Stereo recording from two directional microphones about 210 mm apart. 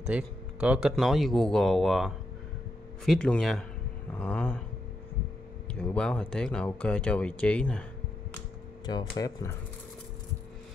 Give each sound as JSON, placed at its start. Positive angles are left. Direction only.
{"t": 0.0, "sound": "speech", "side_deg": -5}
{"t": 5.7, "sound": "speech", "side_deg": 5}
{"t": 8.8, "sound": "speech", "side_deg": 20}